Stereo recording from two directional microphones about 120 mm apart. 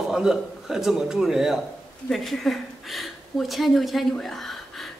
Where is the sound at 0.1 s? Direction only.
5° right (ahead or behind).